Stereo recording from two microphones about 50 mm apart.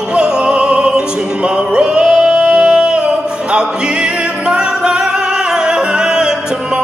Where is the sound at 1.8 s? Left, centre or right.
Centre.